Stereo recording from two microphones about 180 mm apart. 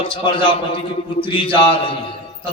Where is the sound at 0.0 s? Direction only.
30° left (ahead or behind).